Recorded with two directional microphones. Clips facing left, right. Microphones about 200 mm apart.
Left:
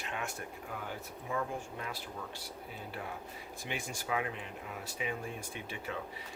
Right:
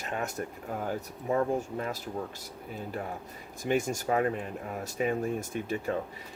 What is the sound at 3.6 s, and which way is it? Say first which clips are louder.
Speech: right 13 dB; 45° right (ahead or behind).